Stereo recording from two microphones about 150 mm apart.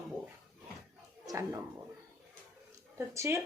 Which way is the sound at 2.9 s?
15° right (ahead or behind).